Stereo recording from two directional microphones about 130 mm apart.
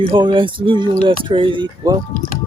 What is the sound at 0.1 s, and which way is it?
Speech, 35° right (ahead or behind).